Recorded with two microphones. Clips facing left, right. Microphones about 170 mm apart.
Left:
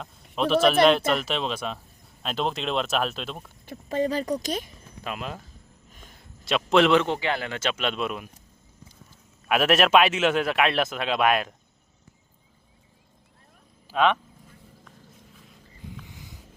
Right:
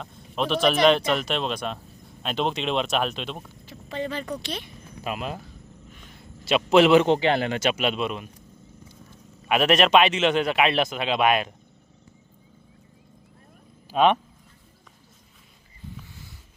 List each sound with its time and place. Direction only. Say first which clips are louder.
0.0 s a man's voice: left 1 dB; centre (ahead or behind)
3.7 s speech: left 5 dB; 40° left (ahead or behind)
5.0 s a man's voice: right 3 dB; 5° right (ahead or behind)
6.4 s a man's voice: right 3 dB; 5° right (ahead or behind)
7.0 s speech: right 6 dB; 25° right (ahead or behind); by 8.3 s centre (ahead or behind)
9.5 s a man's voice: right 1 dB; centre (ahead or behind)
13.9 s speech: right 3 dB; 20° right (ahead or behind)
16.0 s a sound: left 1 dB; 15° left (ahead or behind)